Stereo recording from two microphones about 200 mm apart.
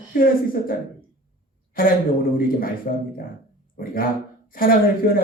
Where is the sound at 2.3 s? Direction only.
45° left (ahead or behind).